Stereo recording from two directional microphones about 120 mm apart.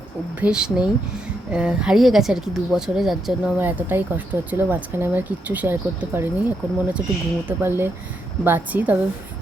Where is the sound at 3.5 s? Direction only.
15° right (ahead or behind).